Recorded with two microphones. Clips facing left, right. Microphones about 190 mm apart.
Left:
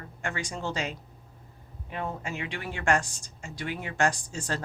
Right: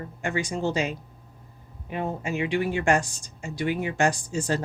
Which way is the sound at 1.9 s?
15° right (ahead or behind).